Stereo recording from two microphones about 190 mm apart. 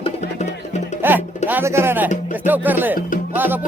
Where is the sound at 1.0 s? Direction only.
10° right (ahead or behind).